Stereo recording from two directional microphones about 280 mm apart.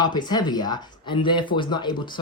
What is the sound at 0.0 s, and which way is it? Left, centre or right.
Speech, centre.